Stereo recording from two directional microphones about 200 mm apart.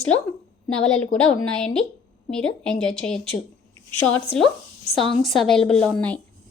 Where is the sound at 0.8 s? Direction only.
5° left (ahead or behind).